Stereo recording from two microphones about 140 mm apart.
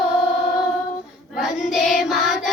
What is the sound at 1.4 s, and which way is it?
Child singing, 5° right (ahead or behind).